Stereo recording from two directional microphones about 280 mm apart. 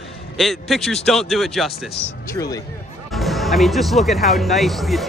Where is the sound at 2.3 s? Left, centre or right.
Centre.